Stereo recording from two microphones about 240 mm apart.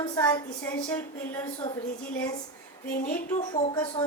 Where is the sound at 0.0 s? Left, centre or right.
Centre.